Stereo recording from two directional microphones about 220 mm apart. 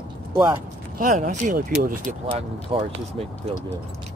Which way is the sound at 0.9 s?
40° right (ahead or behind).